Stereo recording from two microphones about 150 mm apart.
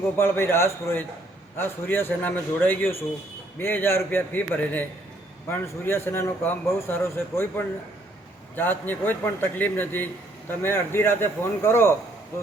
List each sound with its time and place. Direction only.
0.2 s a man's voice: 15° left (ahead or behind)